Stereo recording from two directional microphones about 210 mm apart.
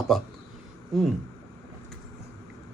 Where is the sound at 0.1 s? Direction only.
Centre (ahead or behind).